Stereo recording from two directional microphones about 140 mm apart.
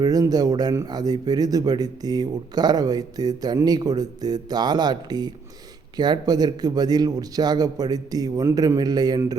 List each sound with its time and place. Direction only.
0.0 s speech: 25° right (ahead or behind)